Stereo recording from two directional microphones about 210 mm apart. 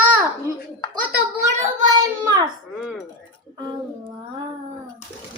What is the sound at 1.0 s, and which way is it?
Speech, 40° right (ahead or behind).